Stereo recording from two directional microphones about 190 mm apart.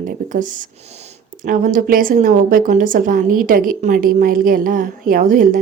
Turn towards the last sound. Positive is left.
turn(degrees=-45)  # may be behind; listen again after turning